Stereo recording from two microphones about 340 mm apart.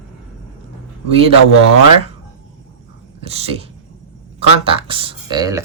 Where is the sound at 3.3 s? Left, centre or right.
Centre.